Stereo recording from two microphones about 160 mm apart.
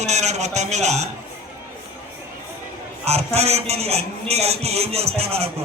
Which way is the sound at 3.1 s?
40° right (ahead or behind).